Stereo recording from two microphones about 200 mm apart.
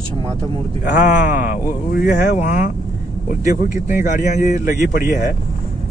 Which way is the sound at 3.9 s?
45° left (ahead or behind).